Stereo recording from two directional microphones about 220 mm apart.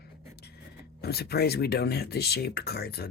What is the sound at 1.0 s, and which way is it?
Speech, 45° left (ahead or behind).